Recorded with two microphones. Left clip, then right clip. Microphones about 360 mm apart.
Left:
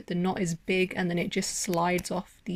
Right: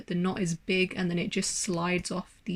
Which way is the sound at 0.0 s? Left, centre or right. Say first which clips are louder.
Left 2 dB; centre.